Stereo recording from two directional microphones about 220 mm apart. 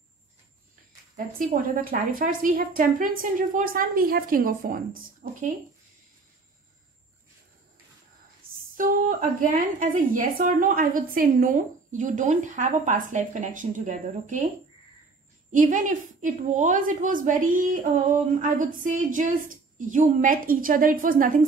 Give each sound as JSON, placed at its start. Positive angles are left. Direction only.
{"t": 1.1, "sound": "a woman's voice", "side_deg": -40}
{"t": 8.4, "sound": "a woman's voice", "side_deg": -40}
{"t": 15.5, "sound": "a woman's voice", "side_deg": -35}